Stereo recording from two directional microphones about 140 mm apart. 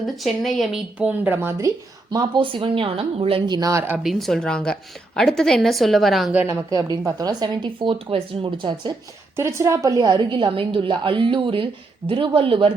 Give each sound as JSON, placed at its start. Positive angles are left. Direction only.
{"t": 0.2, "sound": "speech", "side_deg": 0}
{"t": 2.1, "sound": "a woman's voice", "side_deg": -35}
{"t": 4.0, "sound": "a woman's voice", "side_deg": 0}
{"t": 6.3, "sound": "speech", "side_deg": -15}
{"t": 7.2, "sound": "a woman's voice", "side_deg": -30}
{"t": 9.4, "sound": "a woman's voice", "side_deg": -20}